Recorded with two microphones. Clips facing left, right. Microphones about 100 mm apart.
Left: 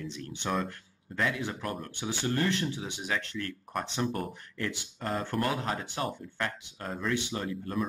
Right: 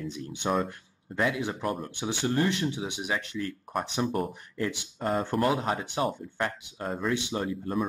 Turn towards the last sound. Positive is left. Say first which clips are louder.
# right 4 dB
turn(degrees=-20)  # may be behind; listen again after turning